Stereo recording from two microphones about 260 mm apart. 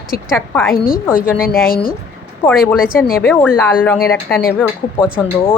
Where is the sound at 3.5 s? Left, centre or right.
Centre.